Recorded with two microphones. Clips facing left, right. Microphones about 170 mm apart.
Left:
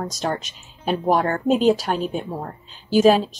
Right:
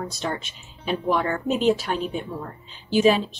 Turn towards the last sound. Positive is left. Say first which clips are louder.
# left 4 dB
turn(degrees=45)  # may be behind; listen again after turning